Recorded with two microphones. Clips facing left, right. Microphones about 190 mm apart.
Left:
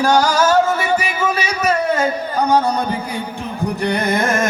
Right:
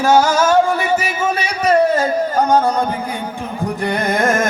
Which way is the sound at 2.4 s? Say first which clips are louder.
Right 1 dB; 45° right (ahead or behind).